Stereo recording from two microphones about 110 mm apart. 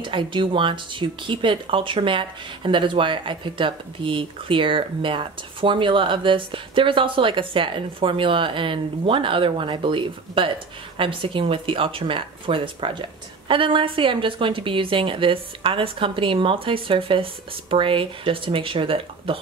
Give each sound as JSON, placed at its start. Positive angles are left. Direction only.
{"t": 0.0, "sound": "speech", "side_deg": -45}